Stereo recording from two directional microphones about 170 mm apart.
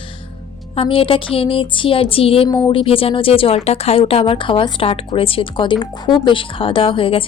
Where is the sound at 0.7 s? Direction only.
30° left (ahead or behind).